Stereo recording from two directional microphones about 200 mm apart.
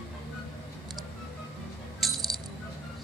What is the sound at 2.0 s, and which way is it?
Music, centre (ahead or behind).